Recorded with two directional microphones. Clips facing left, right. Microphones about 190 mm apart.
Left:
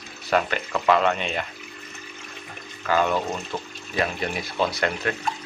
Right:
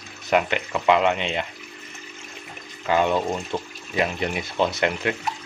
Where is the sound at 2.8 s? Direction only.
20° right (ahead or behind).